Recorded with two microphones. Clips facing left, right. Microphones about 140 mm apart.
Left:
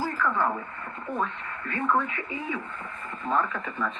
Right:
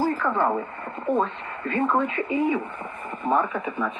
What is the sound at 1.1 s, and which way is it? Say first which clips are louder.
Speech: right 6 dB; 20° right (ahead or behind).